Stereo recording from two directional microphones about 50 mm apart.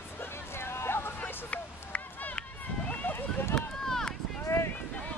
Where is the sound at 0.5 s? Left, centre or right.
Left.